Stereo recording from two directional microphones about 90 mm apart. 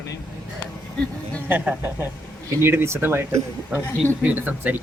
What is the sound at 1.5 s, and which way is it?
Speech, 20° right (ahead or behind).